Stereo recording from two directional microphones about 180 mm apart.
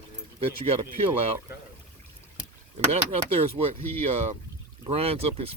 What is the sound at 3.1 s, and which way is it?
Speech, 35° right (ahead or behind).